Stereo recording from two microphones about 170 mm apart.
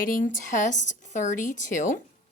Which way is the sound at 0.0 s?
55° left (ahead or behind).